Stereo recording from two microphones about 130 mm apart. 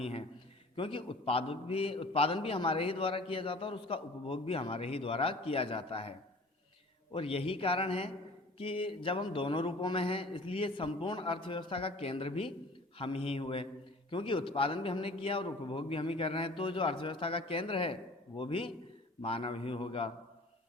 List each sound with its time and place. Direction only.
0.0 s a man's voice: 50° left (ahead or behind)